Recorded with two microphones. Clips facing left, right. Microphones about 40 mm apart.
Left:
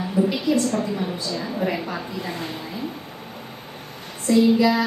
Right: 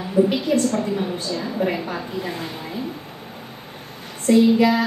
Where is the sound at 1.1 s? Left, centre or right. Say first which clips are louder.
Right 2 dB; right.